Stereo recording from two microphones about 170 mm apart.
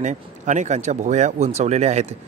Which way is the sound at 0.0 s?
45° right (ahead or behind).